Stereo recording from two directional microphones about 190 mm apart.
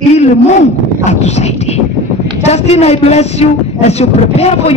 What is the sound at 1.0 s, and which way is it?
Speech, 35° left (ahead or behind).